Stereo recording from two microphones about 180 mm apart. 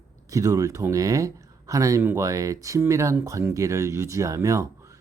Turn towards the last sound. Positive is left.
turn(degrees=-15)  # may be behind; listen again after turning